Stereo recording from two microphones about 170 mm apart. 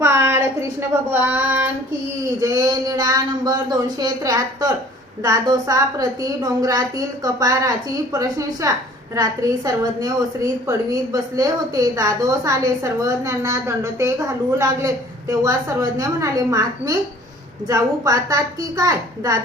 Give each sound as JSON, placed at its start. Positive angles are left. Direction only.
{"t": 0.0, "sound": "child singing", "side_deg": -15}
{"t": 2.4, "sound": "a woman's voice", "side_deg": -20}